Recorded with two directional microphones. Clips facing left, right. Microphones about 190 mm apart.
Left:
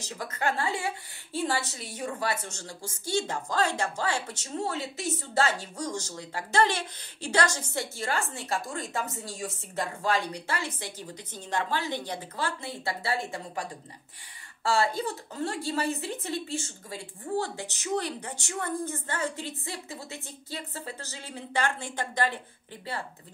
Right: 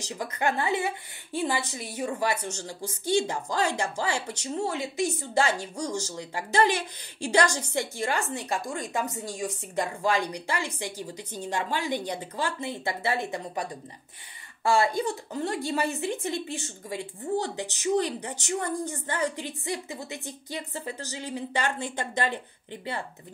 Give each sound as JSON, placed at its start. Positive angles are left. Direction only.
{"t": 0.2, "sound": "a woman's voice", "side_deg": -15}